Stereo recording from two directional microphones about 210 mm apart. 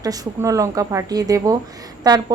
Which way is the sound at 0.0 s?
15° right (ahead or behind).